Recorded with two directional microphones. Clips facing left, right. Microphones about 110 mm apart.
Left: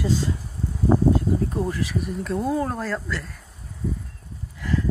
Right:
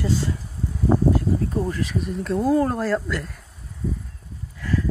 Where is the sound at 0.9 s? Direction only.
Centre (ahead or behind).